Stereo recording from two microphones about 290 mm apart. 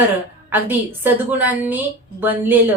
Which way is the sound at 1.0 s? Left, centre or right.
Centre.